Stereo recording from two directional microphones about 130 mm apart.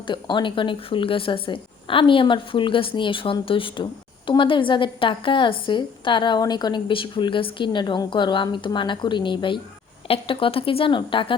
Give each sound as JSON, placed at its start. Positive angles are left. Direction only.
{"t": 0.1, "sound": "a woman's voice", "side_deg": 35}